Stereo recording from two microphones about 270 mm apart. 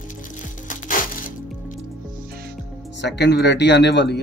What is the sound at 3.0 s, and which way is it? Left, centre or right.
Speech, left.